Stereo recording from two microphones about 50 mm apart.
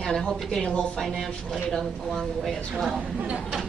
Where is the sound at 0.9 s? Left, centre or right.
Centre.